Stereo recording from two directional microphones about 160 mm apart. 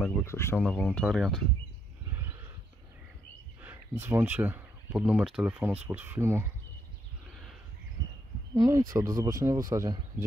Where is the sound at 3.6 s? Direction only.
15° right (ahead or behind).